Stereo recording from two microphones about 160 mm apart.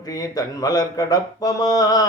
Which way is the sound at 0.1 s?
25° left (ahead or behind).